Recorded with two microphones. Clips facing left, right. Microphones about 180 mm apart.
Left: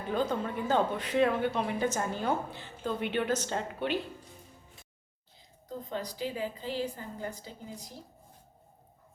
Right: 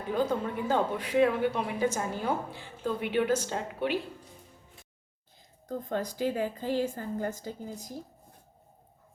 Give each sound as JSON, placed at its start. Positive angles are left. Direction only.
{"t": 0.1, "sound": "speech", "side_deg": -10}
{"t": 5.6, "sound": "a woman's voice", "side_deg": -50}